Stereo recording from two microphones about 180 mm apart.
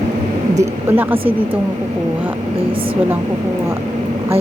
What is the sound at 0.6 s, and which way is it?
Speech, 15° right (ahead or behind).